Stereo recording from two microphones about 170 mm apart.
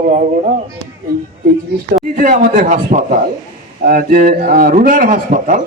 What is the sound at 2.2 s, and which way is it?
A man's voice, 50° right (ahead or behind).